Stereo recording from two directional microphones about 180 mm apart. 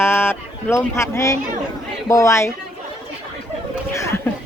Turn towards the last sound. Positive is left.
turn(degrees=15)  # may be behind; listen again after turning